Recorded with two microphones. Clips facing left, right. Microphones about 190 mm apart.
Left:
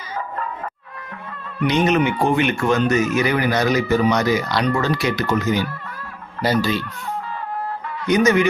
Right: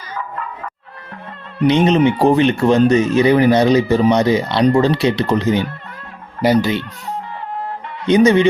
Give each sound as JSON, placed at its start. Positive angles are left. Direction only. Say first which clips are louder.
{"t": 1.5, "sound": "speech", "louder": "right 5 dB", "side_deg": -25}
{"t": 8.0, "sound": "speech", "louder": "right 5 dB", "side_deg": -30}